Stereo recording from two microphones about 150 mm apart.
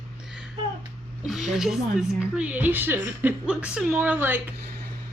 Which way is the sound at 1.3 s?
Centre (ahead or behind).